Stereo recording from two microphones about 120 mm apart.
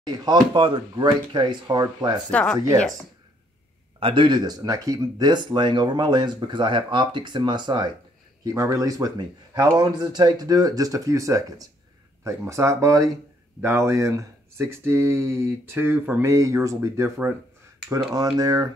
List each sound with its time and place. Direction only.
0.0 s speech: 35° right (ahead or behind)
2.3 s speech: 10° left (ahead or behind)
4.0 s speech: 45° right (ahead or behind)
8.5 s speech: 25° right (ahead or behind)